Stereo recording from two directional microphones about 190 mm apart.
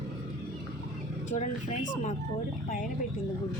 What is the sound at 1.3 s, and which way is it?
Speech, 40° left (ahead or behind).